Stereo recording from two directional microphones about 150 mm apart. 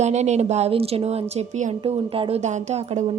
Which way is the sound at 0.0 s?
50° right (ahead or behind).